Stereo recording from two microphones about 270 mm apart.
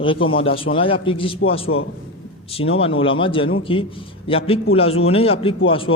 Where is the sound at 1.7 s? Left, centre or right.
Left.